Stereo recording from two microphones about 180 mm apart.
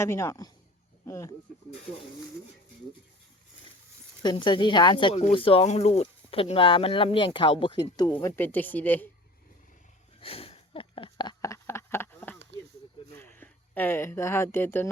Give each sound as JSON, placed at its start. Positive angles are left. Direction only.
{"t": 0.0, "sound": "speech", "side_deg": 15}
{"t": 4.2, "sound": "speech", "side_deg": 25}
{"t": 8.1, "sound": "speech", "side_deg": 10}
{"t": 10.2, "sound": "a sound", "side_deg": 30}